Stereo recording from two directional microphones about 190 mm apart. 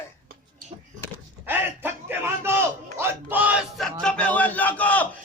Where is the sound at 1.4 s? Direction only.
10° right (ahead or behind); by 5.1 s 10° left (ahead or behind).